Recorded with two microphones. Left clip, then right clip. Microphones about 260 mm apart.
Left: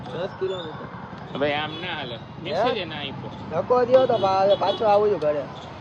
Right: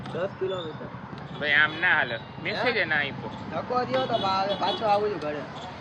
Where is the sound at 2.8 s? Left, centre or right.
Centre.